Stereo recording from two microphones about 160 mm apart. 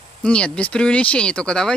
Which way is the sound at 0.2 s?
5° left (ahead or behind).